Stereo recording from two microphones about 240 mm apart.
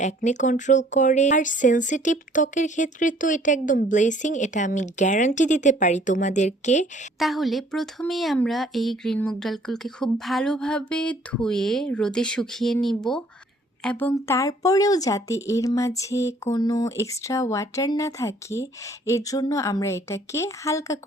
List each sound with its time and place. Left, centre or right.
0.0 s speech: left
7.2 s a woman's voice: centre